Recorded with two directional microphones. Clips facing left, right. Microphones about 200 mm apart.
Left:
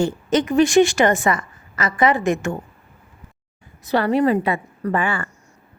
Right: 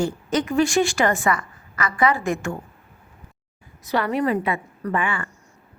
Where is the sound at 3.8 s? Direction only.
30° left (ahead or behind).